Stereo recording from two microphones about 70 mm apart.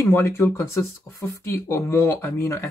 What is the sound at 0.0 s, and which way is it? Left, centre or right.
Speech, left.